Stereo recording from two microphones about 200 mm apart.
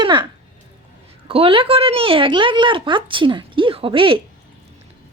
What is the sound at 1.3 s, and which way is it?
Speech, 30° right (ahead or behind).